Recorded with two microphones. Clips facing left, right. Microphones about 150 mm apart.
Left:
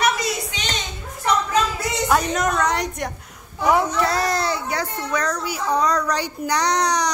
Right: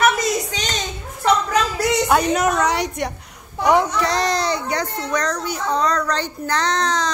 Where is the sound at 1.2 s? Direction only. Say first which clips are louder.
Right 2 dB; 75° right (ahead or behind).